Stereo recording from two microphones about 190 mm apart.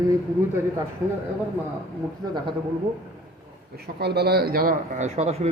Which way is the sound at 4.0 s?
60° right (ahead or behind).